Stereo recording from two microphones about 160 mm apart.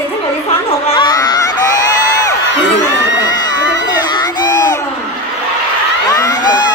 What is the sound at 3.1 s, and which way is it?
Crowd, 25° left (ahead or behind).